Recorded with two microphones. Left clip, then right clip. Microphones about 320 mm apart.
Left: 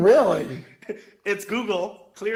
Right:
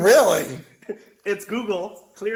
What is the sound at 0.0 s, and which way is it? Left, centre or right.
Speech, right.